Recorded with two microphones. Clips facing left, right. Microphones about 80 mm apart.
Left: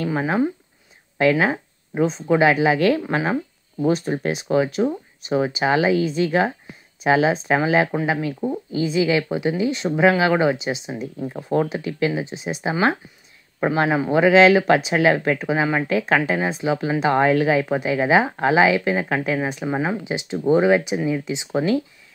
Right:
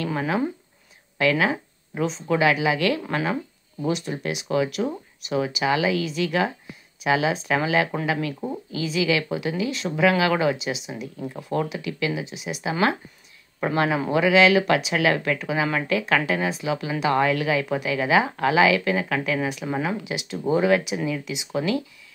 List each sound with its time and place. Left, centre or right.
0.0 s speech: left
13.7 s speech: left
20.6 s speech: left